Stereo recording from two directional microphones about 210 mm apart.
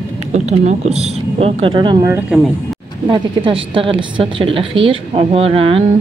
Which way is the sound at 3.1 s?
25° right (ahead or behind).